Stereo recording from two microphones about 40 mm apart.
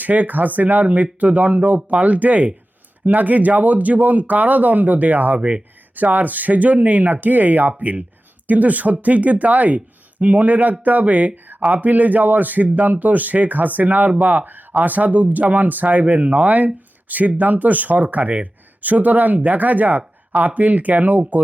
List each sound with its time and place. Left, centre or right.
0.0 s speech: right
5.4 s speech: right
5.9 s speech: right